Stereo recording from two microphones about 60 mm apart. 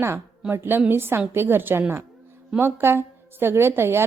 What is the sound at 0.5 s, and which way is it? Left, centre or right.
A woman's voice, right.